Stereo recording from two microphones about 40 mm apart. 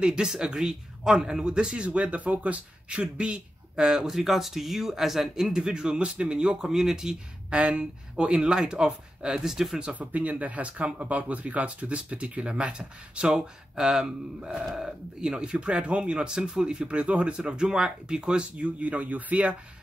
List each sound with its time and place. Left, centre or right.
0.0 s speech: right
4.1 s speech: centre
5.7 s speech: right
6.7 s speech: centre
7.4 s speech: right; by 9.8 s centre
9.9 s speech: right
13.7 s speech: centre
16.3 s speech: centre; by 19.5 s right